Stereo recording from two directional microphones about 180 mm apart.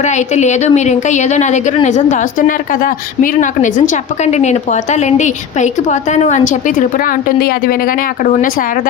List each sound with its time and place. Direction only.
0.0 s a woman's voice: 40° left (ahead or behind); by 7.8 s 55° left (ahead or behind)